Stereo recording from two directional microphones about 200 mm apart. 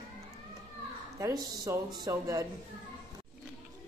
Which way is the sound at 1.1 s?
15° right (ahead or behind).